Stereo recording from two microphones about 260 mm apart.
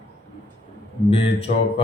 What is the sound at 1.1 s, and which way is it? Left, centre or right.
Mantra, left.